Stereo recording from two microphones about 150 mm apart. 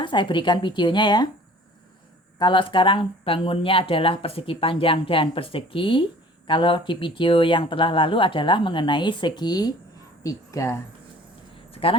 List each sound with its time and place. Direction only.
0.0 s speech: 30° left (ahead or behind)
2.4 s a woman's voice: 30° left (ahead or behind)
11.7 s a sound: 40° left (ahead or behind)